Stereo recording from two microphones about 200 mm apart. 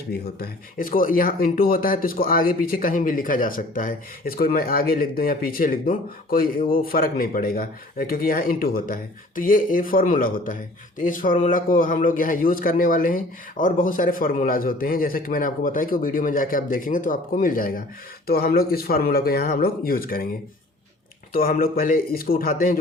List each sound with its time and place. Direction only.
0.1 s speech: 50° left (ahead or behind)
21.3 s speech: 45° left (ahead or behind)